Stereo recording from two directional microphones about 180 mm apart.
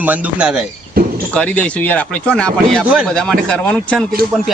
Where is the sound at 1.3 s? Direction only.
10° left (ahead or behind).